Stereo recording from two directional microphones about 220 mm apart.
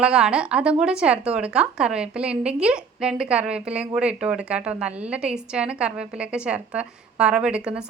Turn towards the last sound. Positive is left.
turn(degrees=-5)  # may be behind; listen again after turning